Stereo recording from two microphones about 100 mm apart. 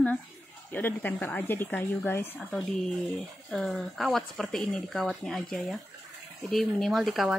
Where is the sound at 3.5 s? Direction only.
5° left (ahead or behind).